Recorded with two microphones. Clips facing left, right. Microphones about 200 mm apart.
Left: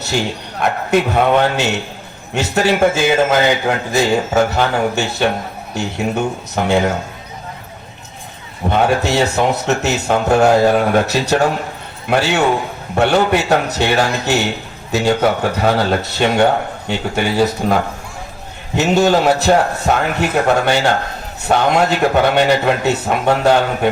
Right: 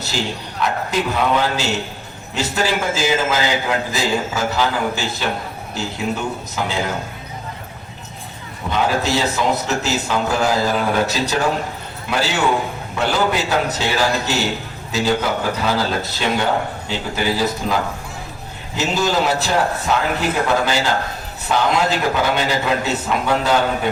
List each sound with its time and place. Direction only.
0.6 s a man's voice: 55° left (ahead or behind)
8.7 s a man's voice: 60° left (ahead or behind)
18.8 s a man's voice: 60° left (ahead or behind)